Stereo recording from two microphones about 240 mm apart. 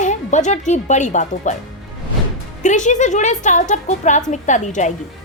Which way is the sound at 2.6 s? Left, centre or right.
Left.